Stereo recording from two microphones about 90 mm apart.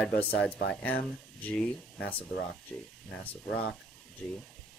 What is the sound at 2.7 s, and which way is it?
Speech, 5° left (ahead or behind).